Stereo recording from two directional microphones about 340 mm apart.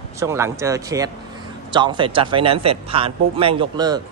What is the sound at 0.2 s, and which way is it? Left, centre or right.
Speech, centre.